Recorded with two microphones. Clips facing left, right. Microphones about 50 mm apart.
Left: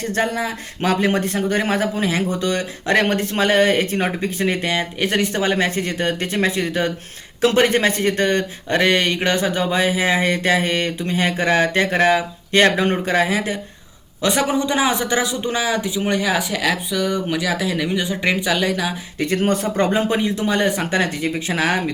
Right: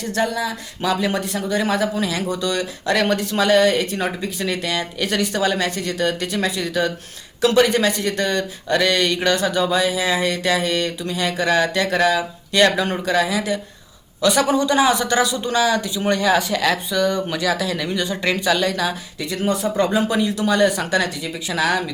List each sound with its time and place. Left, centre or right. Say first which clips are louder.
0.0 s speech: left 1 dB; left; by 18.9 s centre
19.2 s speech: left 3 dB; left